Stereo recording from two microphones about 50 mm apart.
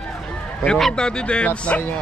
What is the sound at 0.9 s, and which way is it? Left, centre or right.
Speech, centre.